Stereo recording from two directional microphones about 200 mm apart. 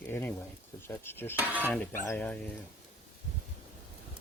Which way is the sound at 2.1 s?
5° left (ahead or behind).